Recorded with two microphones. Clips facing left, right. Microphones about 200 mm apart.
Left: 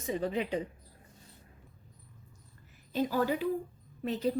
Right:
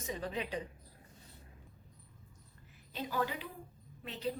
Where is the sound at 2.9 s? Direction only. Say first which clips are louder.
Left 8 dB; 40° left (ahead or behind).